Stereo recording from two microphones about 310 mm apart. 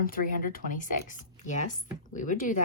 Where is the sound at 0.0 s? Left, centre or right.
Left.